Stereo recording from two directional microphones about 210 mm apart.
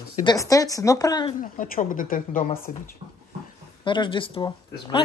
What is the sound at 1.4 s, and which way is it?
Speech, 40° left (ahead or behind).